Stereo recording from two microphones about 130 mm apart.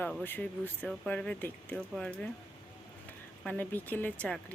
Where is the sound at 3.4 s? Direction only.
15° left (ahead or behind).